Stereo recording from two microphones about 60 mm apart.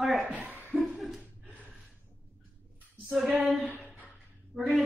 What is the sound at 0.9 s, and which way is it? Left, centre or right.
Chuckle, centre.